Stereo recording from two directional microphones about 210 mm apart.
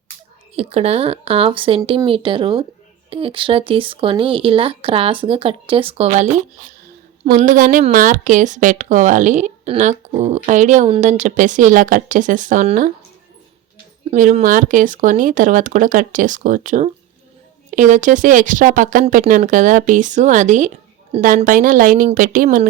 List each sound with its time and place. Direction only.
0.5 s a woman's voice: 30° right (ahead or behind)
14.1 s a woman's voice: 35° right (ahead or behind)